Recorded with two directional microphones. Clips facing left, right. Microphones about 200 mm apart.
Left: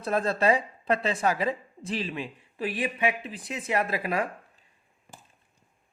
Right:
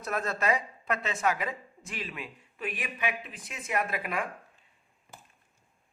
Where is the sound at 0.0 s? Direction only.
30° left (ahead or behind).